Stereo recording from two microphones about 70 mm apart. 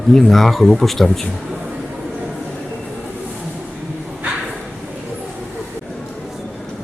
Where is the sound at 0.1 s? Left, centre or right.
Centre.